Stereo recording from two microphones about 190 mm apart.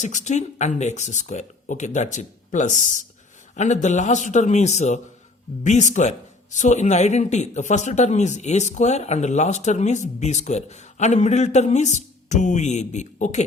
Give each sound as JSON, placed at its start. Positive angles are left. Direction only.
{"t": 0.0, "sound": "speech", "side_deg": 40}